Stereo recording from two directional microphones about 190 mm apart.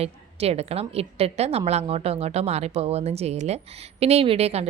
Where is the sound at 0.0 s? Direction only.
35° right (ahead or behind).